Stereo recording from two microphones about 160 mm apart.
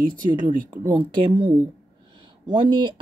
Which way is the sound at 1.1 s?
30° right (ahead or behind).